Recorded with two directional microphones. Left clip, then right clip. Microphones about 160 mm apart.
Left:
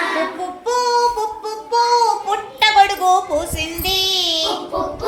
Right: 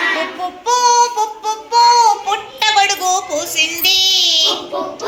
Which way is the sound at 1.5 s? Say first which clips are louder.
Right 6 dB; 75° left (ahead or behind).